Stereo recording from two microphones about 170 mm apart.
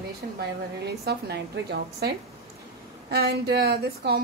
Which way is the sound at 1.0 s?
70° right (ahead or behind).